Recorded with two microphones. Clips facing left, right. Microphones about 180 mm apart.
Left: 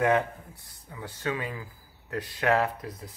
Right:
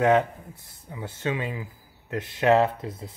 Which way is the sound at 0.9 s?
25° right (ahead or behind).